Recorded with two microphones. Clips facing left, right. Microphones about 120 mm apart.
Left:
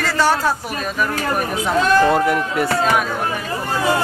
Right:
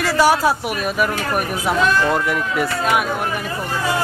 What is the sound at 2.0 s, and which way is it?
Speech, 45° left (ahead or behind).